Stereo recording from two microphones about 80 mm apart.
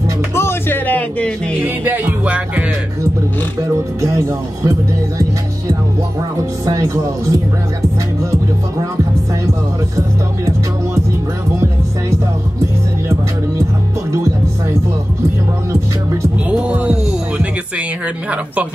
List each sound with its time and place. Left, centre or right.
0.3 s music: left
1.6 s music: right
4.0 s speech: right
6.6 s speech: right
16.4 s music: centre